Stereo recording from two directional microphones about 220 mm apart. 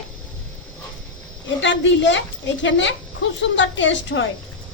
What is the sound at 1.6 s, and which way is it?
A woman's voice, 55° left (ahead or behind).